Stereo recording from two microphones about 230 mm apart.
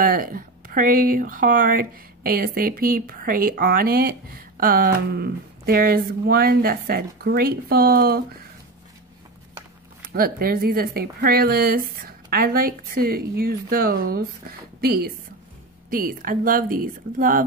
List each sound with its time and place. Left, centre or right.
0.0 s speech: right
10.1 s a woman's voice: right